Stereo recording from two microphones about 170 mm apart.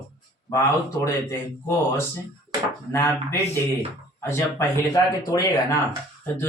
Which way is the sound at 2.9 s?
15° left (ahead or behind).